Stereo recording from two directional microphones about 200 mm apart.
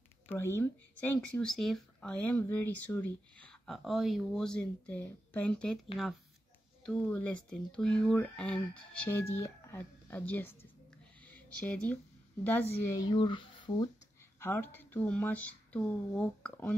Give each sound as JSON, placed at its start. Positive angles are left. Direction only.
{"t": 0.3, "sound": "speech", "side_deg": 15}
{"t": 6.9, "sound": "speech", "side_deg": 5}
{"t": 14.4, "sound": "speech", "side_deg": 10}